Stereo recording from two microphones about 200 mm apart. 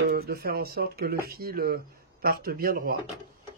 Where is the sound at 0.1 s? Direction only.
50° right (ahead or behind).